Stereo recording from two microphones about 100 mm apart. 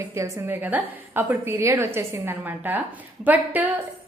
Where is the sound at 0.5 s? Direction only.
20° right (ahead or behind).